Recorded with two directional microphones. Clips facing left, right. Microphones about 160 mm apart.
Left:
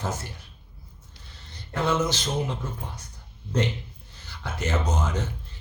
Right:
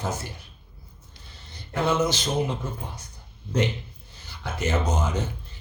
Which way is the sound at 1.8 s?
15° right (ahead or behind).